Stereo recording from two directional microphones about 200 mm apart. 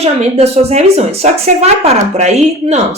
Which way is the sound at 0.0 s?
30° right (ahead or behind).